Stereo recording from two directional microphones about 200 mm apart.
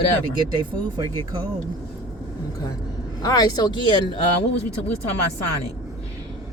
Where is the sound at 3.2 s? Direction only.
20° left (ahead or behind).